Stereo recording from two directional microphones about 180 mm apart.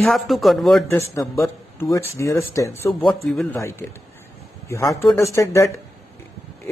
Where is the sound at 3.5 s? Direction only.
15° left (ahead or behind).